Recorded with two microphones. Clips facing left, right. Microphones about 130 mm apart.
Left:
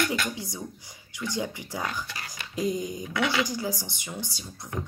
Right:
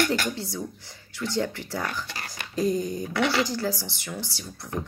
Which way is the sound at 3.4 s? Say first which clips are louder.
Right 3 dB; 15° left (ahead or behind).